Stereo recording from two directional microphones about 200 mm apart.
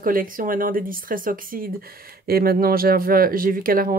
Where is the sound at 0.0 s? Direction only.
45° right (ahead or behind).